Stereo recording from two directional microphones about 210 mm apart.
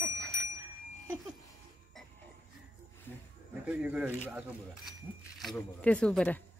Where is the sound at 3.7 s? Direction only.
10° right (ahead or behind).